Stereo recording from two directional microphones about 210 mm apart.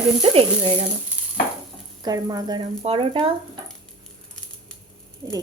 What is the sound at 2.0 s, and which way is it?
Speech, 20° right (ahead or behind).